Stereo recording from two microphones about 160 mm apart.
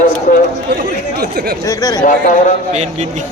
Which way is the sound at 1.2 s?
85° right.